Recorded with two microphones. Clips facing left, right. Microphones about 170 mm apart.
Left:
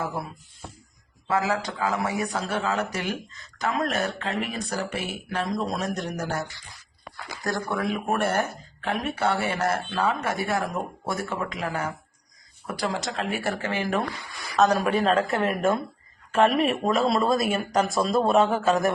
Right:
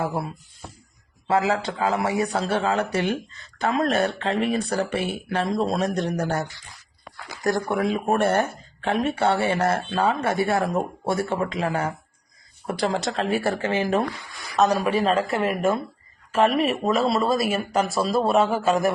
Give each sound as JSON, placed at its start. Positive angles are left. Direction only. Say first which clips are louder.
{"t": 0.0, "sound": "speech", "louder": "right 4 dB", "side_deg": -30}
{"t": 1.4, "sound": "speech", "louder": "right 3 dB", "side_deg": -25}
{"t": 13.1, "sound": "speech", "louder": "right 5 dB", "side_deg": -30}
{"t": 14.8, "sound": "speech", "louder": "right 1 dB", "side_deg": 0}